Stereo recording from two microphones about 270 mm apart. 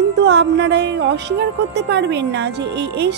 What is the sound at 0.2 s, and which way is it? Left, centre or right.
Speech, right.